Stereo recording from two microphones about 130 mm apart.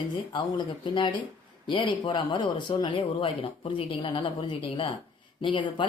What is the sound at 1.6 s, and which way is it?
Speech, 35° left (ahead or behind).